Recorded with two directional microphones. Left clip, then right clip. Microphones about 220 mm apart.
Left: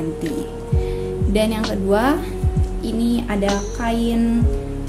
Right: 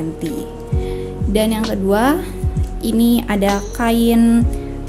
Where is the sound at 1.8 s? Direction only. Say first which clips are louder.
Right 2 dB; 20° right (ahead or behind).